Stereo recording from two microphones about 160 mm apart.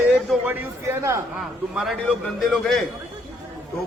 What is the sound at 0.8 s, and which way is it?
Speech, 20° right (ahead or behind).